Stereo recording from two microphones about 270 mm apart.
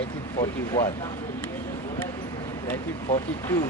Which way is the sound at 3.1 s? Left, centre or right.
Left.